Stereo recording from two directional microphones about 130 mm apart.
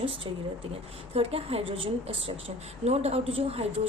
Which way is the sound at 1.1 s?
50° right (ahead or behind).